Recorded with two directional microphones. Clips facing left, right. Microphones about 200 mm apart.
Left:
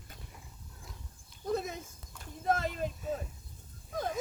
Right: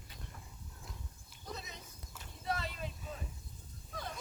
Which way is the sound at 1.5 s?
50° left (ahead or behind).